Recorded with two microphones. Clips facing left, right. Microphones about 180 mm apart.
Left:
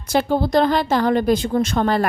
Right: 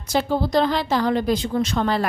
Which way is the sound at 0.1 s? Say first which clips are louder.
Left 3 dB; 55° left (ahead or behind).